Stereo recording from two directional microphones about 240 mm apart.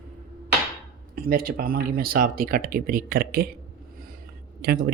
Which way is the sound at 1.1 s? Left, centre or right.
Right.